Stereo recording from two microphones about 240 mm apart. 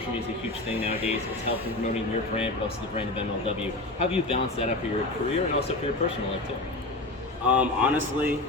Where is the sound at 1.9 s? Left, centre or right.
Left.